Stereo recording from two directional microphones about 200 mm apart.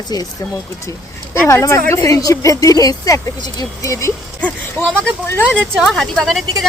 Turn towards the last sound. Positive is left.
turn(degrees=0)  # may be behind; listen again after turning